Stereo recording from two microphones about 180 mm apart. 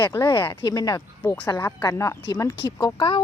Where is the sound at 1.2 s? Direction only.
10° left (ahead or behind).